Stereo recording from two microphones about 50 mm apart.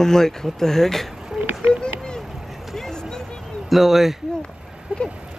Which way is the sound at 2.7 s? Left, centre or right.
Centre.